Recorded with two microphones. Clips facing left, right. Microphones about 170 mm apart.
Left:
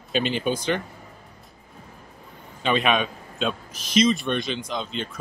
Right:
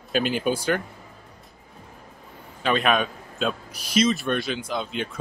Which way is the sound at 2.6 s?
Centre (ahead or behind).